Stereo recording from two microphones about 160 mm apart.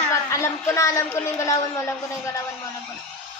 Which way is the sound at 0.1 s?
20° left (ahead or behind).